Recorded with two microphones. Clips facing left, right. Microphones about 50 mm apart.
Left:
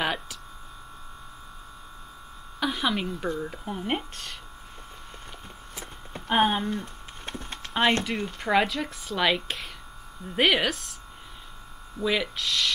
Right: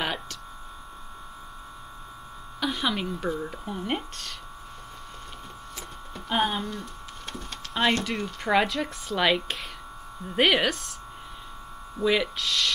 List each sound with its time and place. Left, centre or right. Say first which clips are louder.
0.0 s speech: left 2 dB; centre
2.6 s speech: left 1 dB; centre
3.6 s speech: left 2 dB; centre
5.8 s a sound: left 2 dB; left
8.0 s speech: even; centre
12.0 s speech: right 2 dB; centre